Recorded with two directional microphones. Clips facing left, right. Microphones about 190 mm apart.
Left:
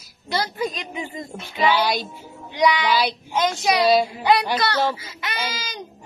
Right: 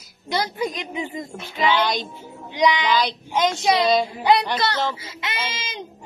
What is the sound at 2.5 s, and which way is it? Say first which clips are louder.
A woman's voice: even; 20° right (ahead or behind).